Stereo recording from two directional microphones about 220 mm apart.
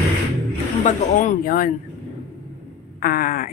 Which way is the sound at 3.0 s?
40° left (ahead or behind).